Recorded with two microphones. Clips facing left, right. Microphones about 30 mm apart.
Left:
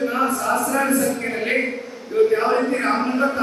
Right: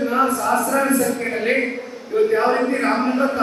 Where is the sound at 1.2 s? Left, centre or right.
Centre.